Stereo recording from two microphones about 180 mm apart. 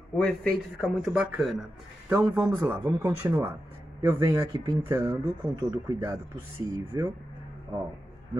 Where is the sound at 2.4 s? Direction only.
20° right (ahead or behind).